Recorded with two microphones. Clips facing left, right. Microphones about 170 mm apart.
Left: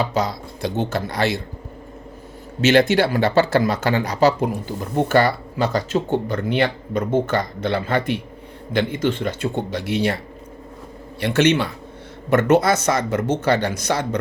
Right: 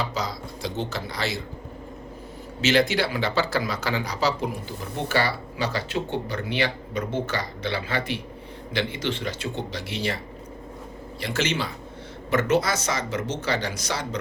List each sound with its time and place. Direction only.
0.1 s speech: 55° left (ahead or behind)
2.6 s speech: 55° left (ahead or behind)
11.2 s speech: 65° left (ahead or behind)